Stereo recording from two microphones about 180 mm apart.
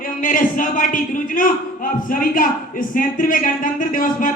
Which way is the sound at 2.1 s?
50° left (ahead or behind).